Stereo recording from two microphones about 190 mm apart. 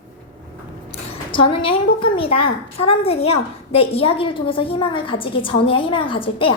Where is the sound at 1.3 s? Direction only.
25° left (ahead or behind).